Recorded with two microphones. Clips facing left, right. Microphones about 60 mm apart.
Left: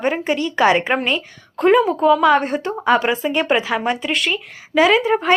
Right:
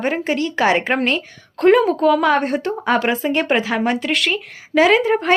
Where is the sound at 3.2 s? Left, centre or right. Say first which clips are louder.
Even; right.